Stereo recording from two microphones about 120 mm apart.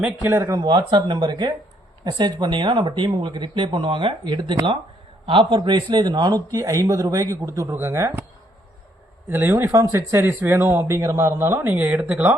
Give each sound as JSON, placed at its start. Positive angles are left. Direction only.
{"t": 0.0, "sound": "speech", "side_deg": -20}
{"t": 0.6, "sound": "a man's voice", "side_deg": -40}
{"t": 9.3, "sound": "speech", "side_deg": -20}